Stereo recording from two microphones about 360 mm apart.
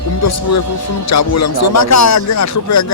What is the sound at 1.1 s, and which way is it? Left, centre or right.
Speech, left.